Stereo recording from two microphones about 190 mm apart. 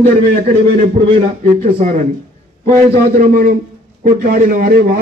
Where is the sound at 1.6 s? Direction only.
40° right (ahead or behind).